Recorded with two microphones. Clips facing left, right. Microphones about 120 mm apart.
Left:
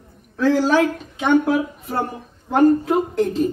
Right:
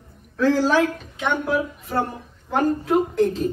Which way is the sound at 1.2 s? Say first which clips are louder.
Left 6 dB; 40° left (ahead or behind).